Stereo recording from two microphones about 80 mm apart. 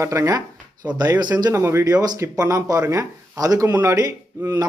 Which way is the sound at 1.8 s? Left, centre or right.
Right.